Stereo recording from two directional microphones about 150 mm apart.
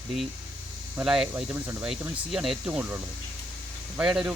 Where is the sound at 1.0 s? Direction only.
5° right (ahead or behind).